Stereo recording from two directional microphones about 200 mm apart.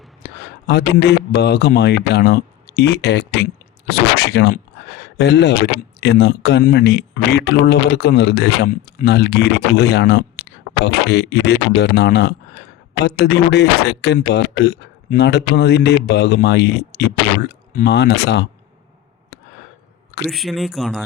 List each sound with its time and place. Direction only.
0.2 s a sound: 55° left (ahead or behind)
0.7 s speech: 55° left (ahead or behind)
20.2 s speech: centre (ahead or behind)